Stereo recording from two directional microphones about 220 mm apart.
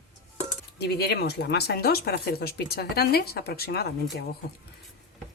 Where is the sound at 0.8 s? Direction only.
45° left (ahead or behind).